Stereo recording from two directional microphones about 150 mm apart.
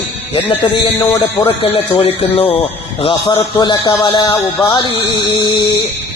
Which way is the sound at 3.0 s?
30° left (ahead or behind).